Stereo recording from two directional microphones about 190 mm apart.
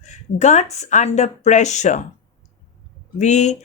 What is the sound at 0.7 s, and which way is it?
Speech, 35° left (ahead or behind).